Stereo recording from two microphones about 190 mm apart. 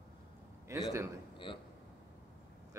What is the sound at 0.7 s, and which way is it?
Speech, 15° right (ahead or behind).